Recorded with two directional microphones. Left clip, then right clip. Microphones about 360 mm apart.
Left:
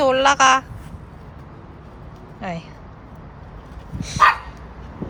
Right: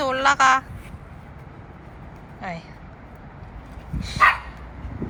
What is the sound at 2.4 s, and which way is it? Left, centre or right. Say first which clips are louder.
Speech: left 3 dB; centre.